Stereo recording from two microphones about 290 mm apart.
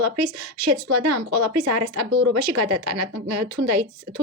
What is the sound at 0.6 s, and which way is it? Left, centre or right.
Speech, right.